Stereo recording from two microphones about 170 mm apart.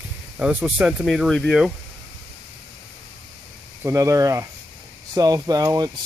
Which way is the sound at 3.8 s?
20° right (ahead or behind).